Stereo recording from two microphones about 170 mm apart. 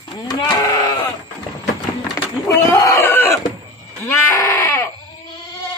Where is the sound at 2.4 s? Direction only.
20° left (ahead or behind).